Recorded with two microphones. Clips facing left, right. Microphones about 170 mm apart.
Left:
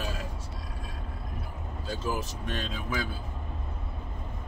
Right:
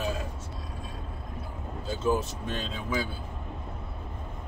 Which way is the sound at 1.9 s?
25° right (ahead or behind).